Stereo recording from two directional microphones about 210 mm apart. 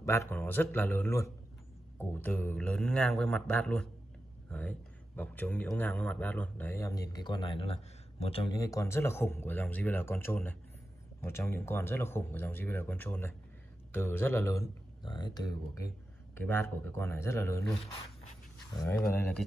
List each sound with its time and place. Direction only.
0.0 s a man's voice: 15° left (ahead or behind)
18.8 s a man's voice: 10° left (ahead or behind)